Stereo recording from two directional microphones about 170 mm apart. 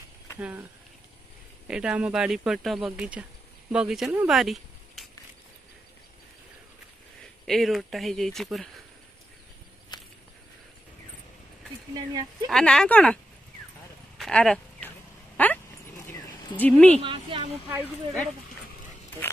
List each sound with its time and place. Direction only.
0.4 s speech: 10° right (ahead or behind)
1.7 s speech: 5° right (ahead or behind)
7.4 s speech: centre (ahead or behind)
9.9 s a sound: 25° left (ahead or behind)
11.9 s speech: 25° right (ahead or behind)
12.4 s speech: 5° left (ahead or behind)
14.1 s a sound: centre (ahead or behind)
15.3 s dog: 10° left (ahead or behind)
16.1 s a sound: 10° left (ahead or behind)
17.0 s a woman's voice: 30° right (ahead or behind)